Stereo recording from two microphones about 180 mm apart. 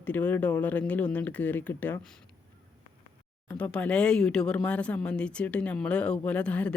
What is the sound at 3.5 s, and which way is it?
Speech, 5° left (ahead or behind).